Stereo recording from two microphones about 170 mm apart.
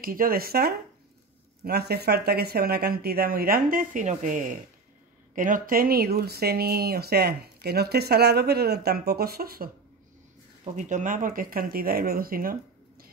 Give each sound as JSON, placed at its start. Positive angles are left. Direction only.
{"t": 0.0, "sound": "speech", "side_deg": -55}
{"t": 10.8, "sound": "speech", "side_deg": -45}